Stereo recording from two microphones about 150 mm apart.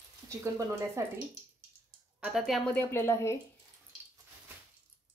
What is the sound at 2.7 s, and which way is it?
Speech, 15° left (ahead or behind).